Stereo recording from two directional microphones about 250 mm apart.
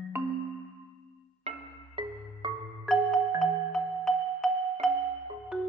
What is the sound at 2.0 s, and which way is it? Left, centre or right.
Music, centre.